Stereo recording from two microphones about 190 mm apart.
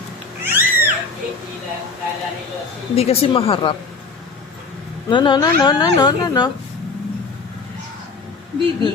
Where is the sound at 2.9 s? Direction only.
30° left (ahead or behind).